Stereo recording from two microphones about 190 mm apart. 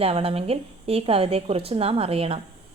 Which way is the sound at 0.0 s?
30° right (ahead or behind).